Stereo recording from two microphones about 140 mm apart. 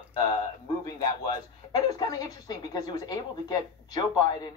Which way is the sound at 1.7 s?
25° left (ahead or behind).